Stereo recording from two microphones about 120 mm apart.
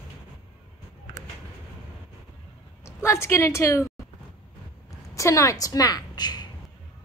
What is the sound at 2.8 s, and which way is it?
A woman's voice, 20° left (ahead or behind).